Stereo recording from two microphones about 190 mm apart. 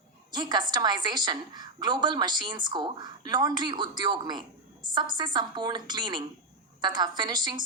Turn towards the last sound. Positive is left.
turn(degrees=-20)  # may be behind; listen again after turning